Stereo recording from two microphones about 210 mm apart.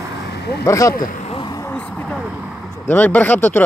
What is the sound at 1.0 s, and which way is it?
Vehicle, 40° left (ahead or behind).